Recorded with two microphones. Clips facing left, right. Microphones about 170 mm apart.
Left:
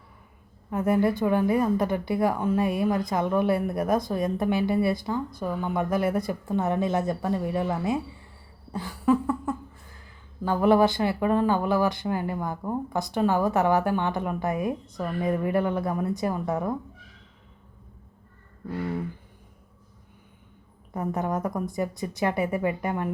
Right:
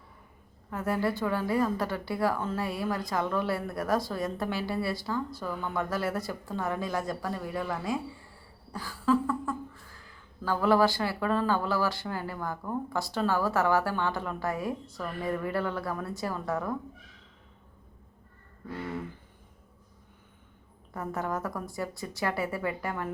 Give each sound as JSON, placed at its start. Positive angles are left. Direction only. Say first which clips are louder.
{"t": 0.7, "sound": "speech", "louder": "left 6 dB", "side_deg": 20}
{"t": 20.9, "sound": "speech", "louder": "left 5 dB", "side_deg": 20}